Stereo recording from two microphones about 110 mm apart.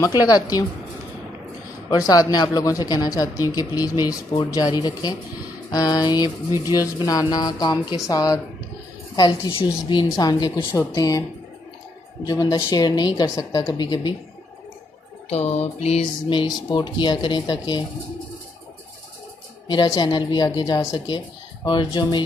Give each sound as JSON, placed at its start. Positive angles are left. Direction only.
{"t": 0.2, "sound": "a woman's voice", "side_deg": 35}
{"t": 1.9, "sound": "a woman's voice", "side_deg": 35}
{"t": 9.5, "sound": "a woman's voice", "side_deg": 45}
{"t": 12.2, "sound": "a woman's voice", "side_deg": 35}
{"t": 15.3, "sound": "music", "side_deg": 70}
{"t": 16.6, "sound": "speech", "side_deg": 45}
{"t": 19.6, "sound": "a woman's voice", "side_deg": 40}